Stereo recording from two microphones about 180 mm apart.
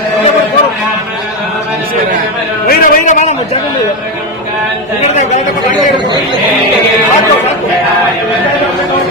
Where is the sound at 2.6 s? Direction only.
45° left (ahead or behind).